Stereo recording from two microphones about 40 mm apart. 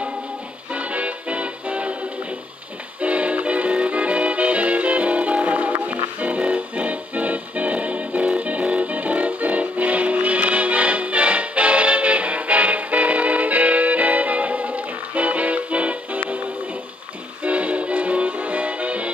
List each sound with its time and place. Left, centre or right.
0.7 s music: right
3.0 s music: right
17.4 s music: right